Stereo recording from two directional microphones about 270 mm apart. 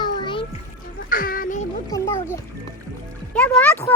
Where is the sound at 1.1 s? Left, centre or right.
Left.